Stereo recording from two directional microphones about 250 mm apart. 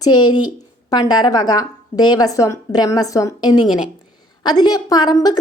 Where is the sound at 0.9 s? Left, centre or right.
Centre.